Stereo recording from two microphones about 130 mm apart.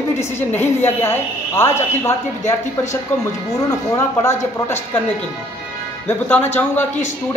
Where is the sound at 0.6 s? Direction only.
20° left (ahead or behind).